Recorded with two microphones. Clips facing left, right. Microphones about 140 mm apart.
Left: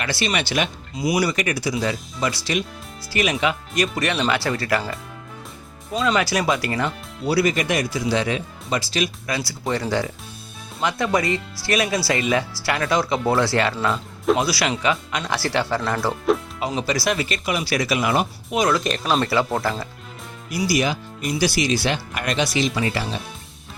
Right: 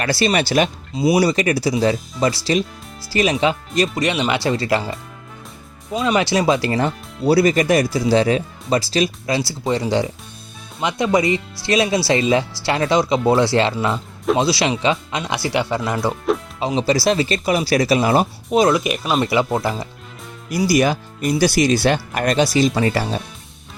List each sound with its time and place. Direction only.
0.0 s speech: 40° right (ahead or behind)
0.9 s speech: 25° right (ahead or behind)
5.9 s speech: 20° right (ahead or behind)
16.6 s speech: 25° right (ahead or behind)
18.8 s speech: 5° right (ahead or behind)
19.2 s speech: 15° right (ahead or behind)
20.5 s speech: 45° right (ahead or behind)